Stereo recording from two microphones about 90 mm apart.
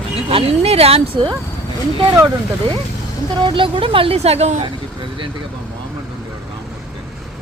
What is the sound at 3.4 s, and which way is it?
Speech, 70° right (ahead or behind).